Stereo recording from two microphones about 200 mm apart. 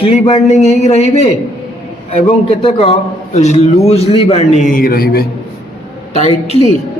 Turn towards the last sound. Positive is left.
turn(degrees=35)  # may be behind; listen again after turning